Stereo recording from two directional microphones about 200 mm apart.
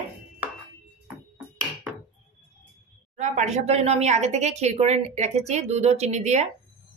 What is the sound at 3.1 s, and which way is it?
Speech, 35° right (ahead or behind).